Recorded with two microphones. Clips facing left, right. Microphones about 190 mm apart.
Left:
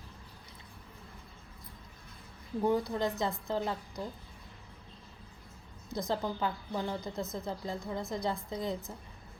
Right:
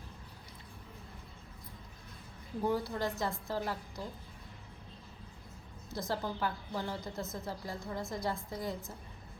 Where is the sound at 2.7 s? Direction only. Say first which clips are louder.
Left 3 dB; 20° left (ahead or behind).